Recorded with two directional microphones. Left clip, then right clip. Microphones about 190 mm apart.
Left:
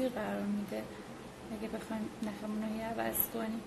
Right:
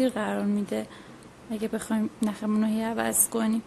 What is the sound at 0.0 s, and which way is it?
Speech, 40° right (ahead or behind).